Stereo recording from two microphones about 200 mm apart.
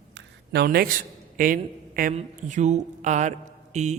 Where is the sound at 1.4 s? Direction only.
45° right (ahead or behind).